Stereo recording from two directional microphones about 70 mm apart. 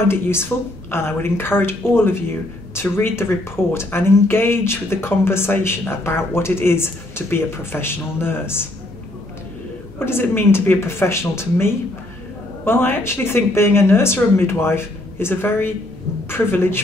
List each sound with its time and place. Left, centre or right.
0.1 s speech: left
9.9 s speech: left